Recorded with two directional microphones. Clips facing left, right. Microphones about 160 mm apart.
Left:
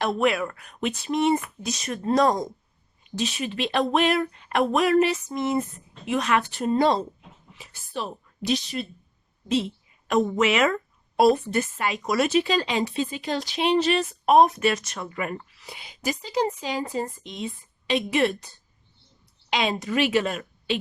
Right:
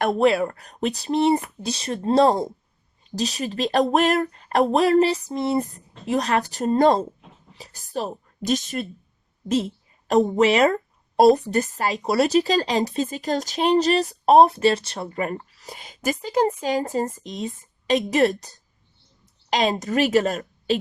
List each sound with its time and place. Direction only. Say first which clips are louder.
0.2 s a woman's voice: right 5 dB; 30° right (ahead or behind)